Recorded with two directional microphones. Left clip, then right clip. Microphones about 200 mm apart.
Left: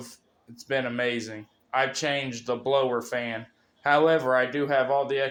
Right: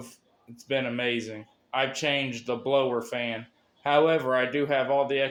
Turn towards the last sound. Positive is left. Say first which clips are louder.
# even
turn(degrees=-20)  # may be behind; listen again after turning